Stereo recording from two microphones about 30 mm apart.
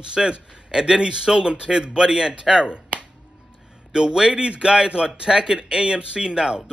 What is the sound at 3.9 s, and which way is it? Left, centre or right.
A man's voice, right.